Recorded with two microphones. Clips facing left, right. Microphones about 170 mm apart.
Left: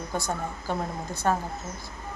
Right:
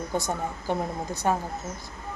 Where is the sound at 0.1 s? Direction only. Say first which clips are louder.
Right 1 dB; 20° right (ahead or behind).